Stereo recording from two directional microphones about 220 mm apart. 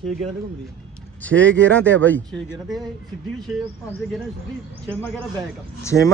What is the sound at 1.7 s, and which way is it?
Speech, 5° left (ahead or behind).